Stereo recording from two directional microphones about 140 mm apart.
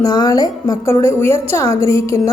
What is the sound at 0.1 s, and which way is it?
Speech, 25° left (ahead or behind).